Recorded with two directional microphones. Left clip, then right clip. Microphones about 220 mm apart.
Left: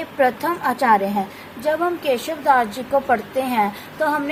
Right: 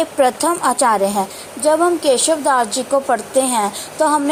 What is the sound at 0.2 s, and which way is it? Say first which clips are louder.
A woman's voice: right 2 dB; 20° right (ahead or behind).